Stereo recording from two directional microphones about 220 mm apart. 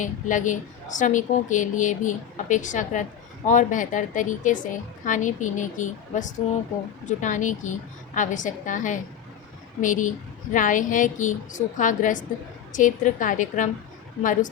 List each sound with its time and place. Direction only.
0.0 s a woman's voice: 35° left (ahead or behind)